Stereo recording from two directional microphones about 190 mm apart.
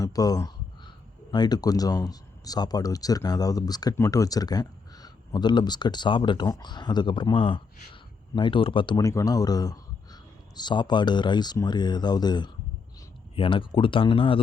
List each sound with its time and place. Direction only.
0.0 s speech: 20° left (ahead or behind)